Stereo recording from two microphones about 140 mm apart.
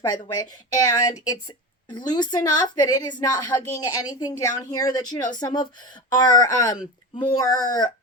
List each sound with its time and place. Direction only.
0.1 s a woman's voice: 25° left (ahead or behind)